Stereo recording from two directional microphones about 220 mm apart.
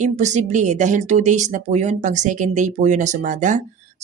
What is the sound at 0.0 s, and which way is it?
Speech, 30° right (ahead or behind).